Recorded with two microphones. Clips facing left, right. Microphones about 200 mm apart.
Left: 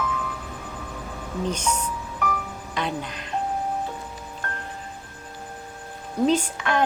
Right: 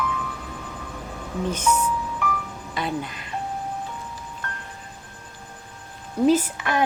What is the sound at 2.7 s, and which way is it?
Speech, 5° right (ahead or behind).